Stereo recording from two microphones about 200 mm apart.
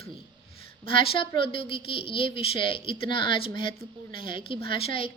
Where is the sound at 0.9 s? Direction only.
25° left (ahead or behind).